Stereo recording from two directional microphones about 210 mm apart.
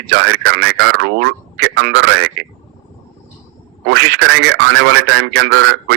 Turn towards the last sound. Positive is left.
turn(degrees=-55)  # may be behind; listen again after turning